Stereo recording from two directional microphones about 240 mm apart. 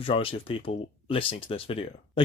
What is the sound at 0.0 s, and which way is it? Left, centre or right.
Speech, left.